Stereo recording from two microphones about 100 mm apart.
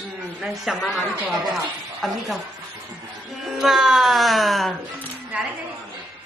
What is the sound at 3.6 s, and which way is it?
Speech, 5° right (ahead or behind).